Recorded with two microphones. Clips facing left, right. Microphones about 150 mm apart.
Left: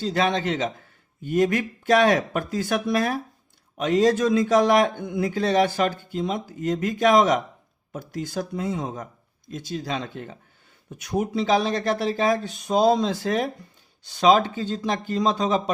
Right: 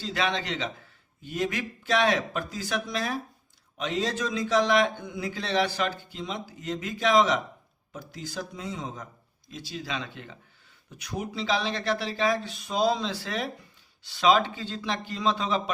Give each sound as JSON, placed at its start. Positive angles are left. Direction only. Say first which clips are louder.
{"t": 0.0, "sound": "a man's voice", "louder": "left 6 dB", "side_deg": 45}